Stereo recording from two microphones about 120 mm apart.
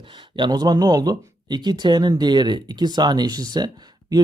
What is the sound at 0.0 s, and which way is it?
Speech, 40° right (ahead or behind).